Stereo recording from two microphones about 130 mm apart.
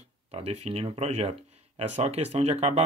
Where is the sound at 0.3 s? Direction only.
50° right (ahead or behind).